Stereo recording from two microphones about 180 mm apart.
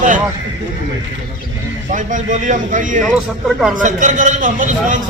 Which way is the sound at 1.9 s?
45° right (ahead or behind).